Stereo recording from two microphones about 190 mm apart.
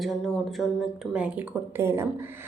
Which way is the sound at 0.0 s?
Centre (ahead or behind).